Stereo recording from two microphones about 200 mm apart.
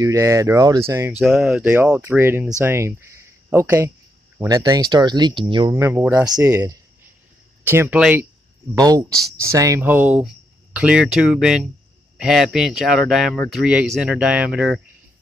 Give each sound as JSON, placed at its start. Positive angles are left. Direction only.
{"t": 0.0, "sound": "speech", "side_deg": -15}
{"t": 1.2, "sound": "speech", "side_deg": 0}
{"t": 8.7, "sound": "speech", "side_deg": -20}